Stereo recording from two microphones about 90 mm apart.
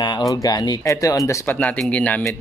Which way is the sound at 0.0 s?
45° left (ahead or behind).